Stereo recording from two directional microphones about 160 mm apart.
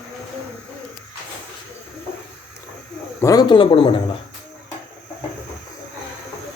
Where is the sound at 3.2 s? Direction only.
20° left (ahead or behind).